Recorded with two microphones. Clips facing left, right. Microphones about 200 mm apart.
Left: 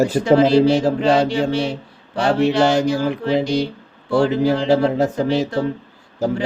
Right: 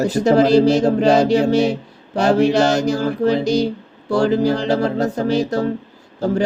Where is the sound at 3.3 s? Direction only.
40° right (ahead or behind).